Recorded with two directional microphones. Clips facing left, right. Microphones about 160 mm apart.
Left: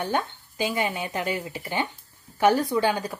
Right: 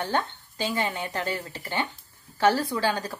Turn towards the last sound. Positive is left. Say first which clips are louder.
# left 3 dB
turn(degrees=15)  # may be behind; listen again after turning